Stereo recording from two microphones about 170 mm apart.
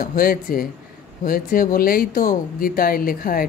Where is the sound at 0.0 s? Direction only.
55° left (ahead or behind).